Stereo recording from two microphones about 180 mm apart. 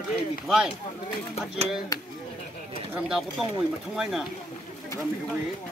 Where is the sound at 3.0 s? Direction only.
5° right (ahead or behind).